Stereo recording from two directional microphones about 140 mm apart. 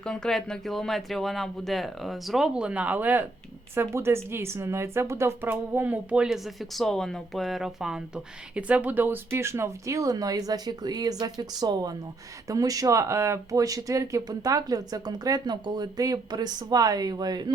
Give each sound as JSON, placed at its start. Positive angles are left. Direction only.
{"t": 0.0, "sound": "a woman's voice", "side_deg": 5}